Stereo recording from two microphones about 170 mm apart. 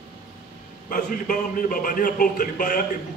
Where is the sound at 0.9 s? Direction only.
50° left (ahead or behind).